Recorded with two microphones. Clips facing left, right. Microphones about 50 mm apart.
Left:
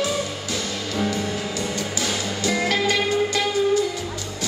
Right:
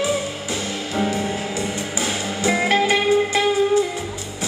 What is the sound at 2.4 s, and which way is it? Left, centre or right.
Music, right.